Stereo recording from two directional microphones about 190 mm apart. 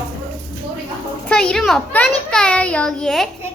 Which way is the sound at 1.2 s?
5° left (ahead or behind).